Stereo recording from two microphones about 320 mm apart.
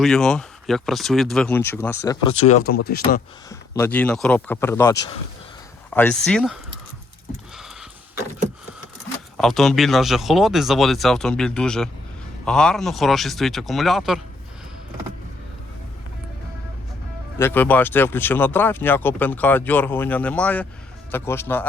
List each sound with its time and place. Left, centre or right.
0.0 s speech: centre
2.4 s speech: left
3.5 s speech: centre
7.5 s a sound: centre
9.4 s speech: centre
17.3 s speech: centre